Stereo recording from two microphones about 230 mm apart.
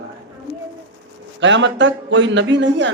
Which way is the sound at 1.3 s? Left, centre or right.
Right.